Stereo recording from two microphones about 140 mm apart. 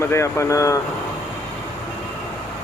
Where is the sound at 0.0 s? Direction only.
20° left (ahead or behind).